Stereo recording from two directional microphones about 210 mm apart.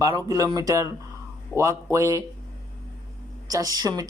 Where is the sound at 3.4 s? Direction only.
15° right (ahead or behind).